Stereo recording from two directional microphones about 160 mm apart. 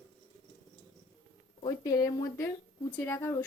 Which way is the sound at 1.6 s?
20° left (ahead or behind).